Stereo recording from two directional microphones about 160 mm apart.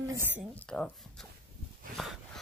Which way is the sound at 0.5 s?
5° left (ahead or behind).